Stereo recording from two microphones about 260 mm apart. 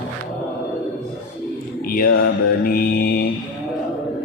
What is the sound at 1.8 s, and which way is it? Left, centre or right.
Mantra, left.